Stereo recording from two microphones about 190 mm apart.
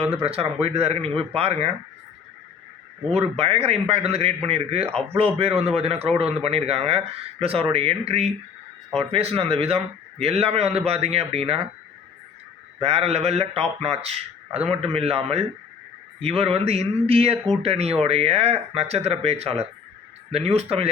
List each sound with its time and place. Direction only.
0.0 s a man's voice: 30° right (ahead or behind)
3.1 s a man's voice: 35° right (ahead or behind)
12.8 s a man's voice: 30° right (ahead or behind)